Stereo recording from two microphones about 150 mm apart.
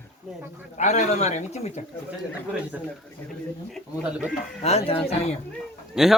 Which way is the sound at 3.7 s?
5° right (ahead or behind).